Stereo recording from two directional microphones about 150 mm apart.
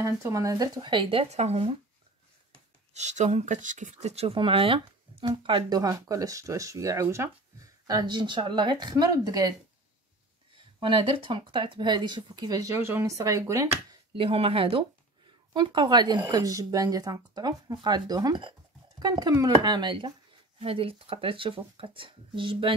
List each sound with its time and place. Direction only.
0.0 s speech: 20° right (ahead or behind); by 1.8 s 40° right (ahead or behind)
2.9 s speech: 50° right (ahead or behind); by 9.5 s 25° right (ahead or behind)
10.8 s speech: 35° right (ahead or behind); by 13.7 s 20° right (ahead or behind)
14.1 s speech: 40° right (ahead or behind)